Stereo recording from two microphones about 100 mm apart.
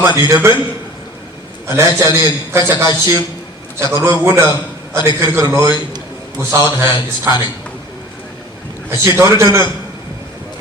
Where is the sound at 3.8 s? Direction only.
30° right (ahead or behind).